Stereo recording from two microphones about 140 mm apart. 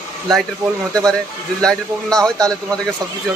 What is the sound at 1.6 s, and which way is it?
Speech, 5° left (ahead or behind).